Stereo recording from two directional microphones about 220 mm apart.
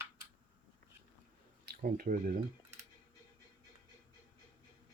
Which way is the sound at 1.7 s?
40° right (ahead or behind).